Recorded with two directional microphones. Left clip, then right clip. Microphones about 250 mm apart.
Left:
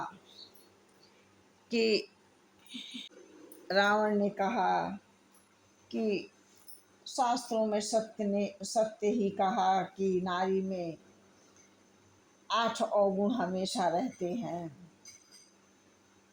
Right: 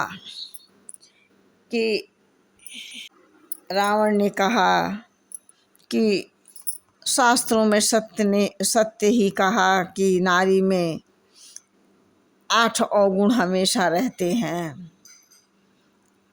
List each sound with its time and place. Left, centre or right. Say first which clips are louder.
1.7 s speech: right 6 dB; centre
2.6 s a sound: right 7 dB; centre
3.7 s speech: right 7 dB; centre
5.9 s a woman's voice: right 12 dB; right
12.5 s a woman's voice: right 11 dB; right